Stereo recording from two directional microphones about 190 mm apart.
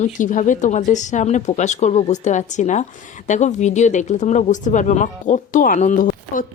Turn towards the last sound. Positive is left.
turn(degrees=45)  # may be behind; listen again after turning